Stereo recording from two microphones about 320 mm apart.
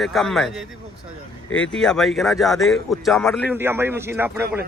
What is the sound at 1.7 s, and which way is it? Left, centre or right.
A man's voice, centre.